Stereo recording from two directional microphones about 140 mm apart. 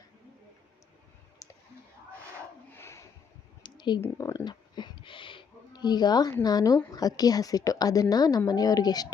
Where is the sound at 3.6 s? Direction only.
30° left (ahead or behind).